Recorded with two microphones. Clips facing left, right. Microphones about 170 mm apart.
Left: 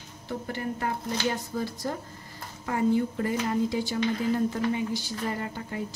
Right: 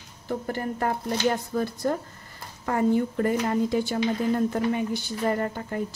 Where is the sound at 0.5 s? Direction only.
45° right (ahead or behind).